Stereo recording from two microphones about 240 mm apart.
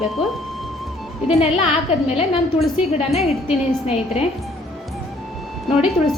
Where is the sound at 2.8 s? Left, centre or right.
Left.